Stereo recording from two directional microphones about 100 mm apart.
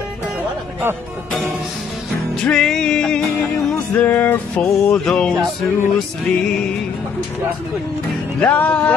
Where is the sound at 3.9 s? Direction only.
20° left (ahead or behind).